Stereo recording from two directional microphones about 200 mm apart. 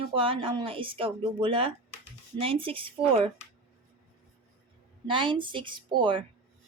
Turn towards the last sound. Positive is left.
turn(degrees=-25)  # may be behind; listen again after turning